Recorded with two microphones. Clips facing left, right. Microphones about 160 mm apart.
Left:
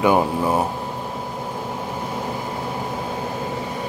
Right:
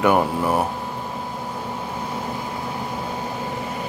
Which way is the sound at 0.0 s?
15° left (ahead or behind).